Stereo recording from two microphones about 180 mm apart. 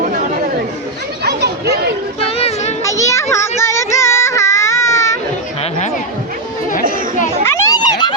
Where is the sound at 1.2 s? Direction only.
65° right (ahead or behind).